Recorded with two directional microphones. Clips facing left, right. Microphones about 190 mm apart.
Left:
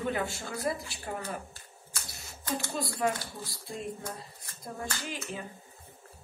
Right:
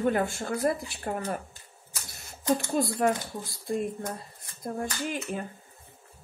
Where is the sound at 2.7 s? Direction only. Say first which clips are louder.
Right 6 dB; 50° right (ahead or behind).